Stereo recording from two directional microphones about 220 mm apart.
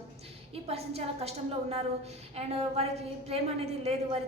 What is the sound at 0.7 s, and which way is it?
A woman's voice, 25° right (ahead or behind).